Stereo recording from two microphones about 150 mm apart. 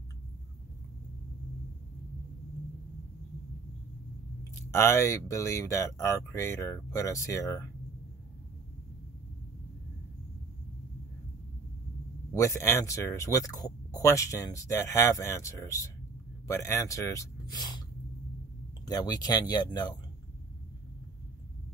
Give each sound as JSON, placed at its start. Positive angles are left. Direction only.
{"t": 4.6, "sound": "speech", "side_deg": 20}
{"t": 12.3, "sound": "speech", "side_deg": 20}
{"t": 18.9, "sound": "speech", "side_deg": 25}